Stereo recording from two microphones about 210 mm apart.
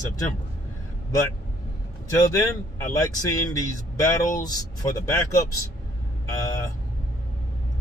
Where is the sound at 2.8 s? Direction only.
15° left (ahead or behind).